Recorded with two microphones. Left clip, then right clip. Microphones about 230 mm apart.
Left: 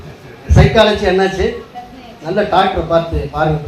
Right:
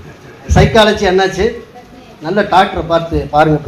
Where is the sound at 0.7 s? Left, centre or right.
Right.